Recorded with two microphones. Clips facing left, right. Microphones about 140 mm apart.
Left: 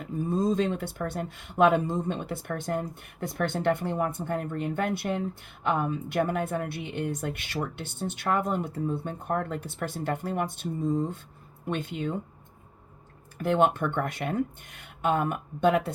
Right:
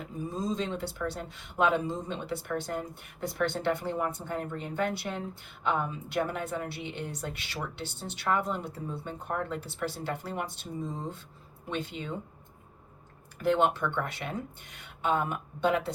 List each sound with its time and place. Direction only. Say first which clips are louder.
0.0 s speech: left 7 dB; 55° left (ahead or behind)
13.4 s speech: left 2 dB; 55° left (ahead or behind)